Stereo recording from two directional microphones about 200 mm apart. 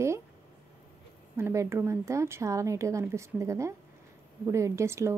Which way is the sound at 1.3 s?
10° right (ahead or behind).